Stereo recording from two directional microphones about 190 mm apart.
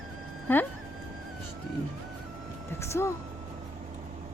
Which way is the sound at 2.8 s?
15° left (ahead or behind).